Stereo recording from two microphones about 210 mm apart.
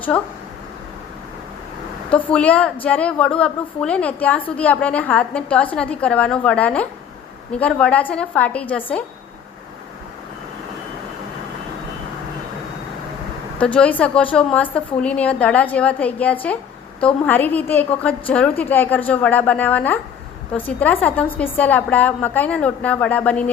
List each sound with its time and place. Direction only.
0.1 s a woman's voice: 10° left (ahead or behind)
2.0 s a woman's voice: 5° left (ahead or behind)
13.6 s a woman's voice: 5° left (ahead or behind)